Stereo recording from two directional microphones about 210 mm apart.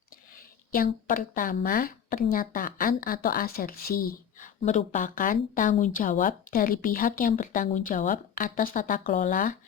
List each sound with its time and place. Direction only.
0.7 s speech: 45° left (ahead or behind)